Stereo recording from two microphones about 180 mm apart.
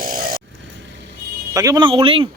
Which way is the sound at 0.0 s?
50° right (ahead or behind).